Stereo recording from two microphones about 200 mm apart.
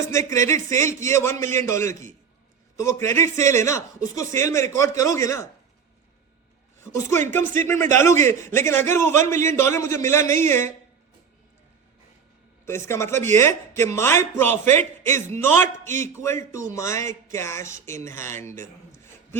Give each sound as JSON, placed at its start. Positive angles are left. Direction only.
{"t": 0.3, "sound": "a man's voice", "side_deg": 15}
{"t": 6.8, "sound": "a woman's voice", "side_deg": 15}
{"t": 12.6, "sound": "a man's voice", "side_deg": 15}
{"t": 15.6, "sound": "a man's voice", "side_deg": -40}
{"t": 16.2, "sound": "a man's voice", "side_deg": 15}